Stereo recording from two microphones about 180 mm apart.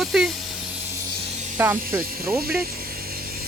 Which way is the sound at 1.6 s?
15° right (ahead or behind).